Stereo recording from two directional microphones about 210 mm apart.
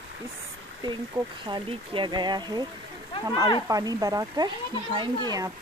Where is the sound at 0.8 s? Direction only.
20° right (ahead or behind).